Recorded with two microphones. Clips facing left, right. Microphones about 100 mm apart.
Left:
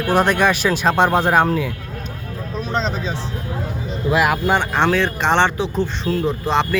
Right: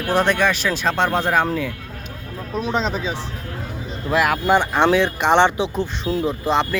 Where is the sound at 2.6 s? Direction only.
10° right (ahead or behind).